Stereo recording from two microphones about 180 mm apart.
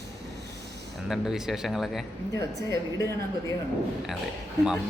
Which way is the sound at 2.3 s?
15° left (ahead or behind).